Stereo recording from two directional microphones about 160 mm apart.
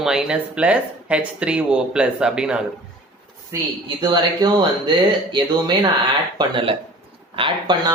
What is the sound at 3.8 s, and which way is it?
Speech, 25° right (ahead or behind).